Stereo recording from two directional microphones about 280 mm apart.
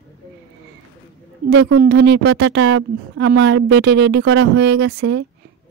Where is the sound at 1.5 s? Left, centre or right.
Right.